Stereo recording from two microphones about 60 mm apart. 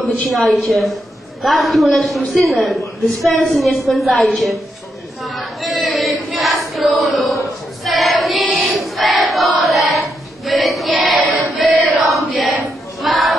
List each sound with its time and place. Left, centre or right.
0.6 s a woman's voice: centre
5.2 s a sound: centre
7.8 s choir: centre
11.1 s choir: right
11.5 s chant: centre
12.1 s a sound: centre